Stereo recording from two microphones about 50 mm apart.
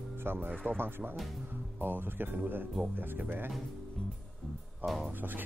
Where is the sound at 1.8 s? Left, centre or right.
Right.